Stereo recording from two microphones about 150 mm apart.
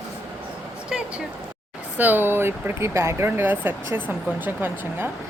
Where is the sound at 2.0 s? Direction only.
10° right (ahead or behind).